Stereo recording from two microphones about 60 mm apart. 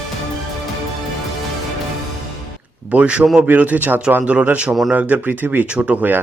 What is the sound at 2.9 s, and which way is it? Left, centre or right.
A man's voice, right.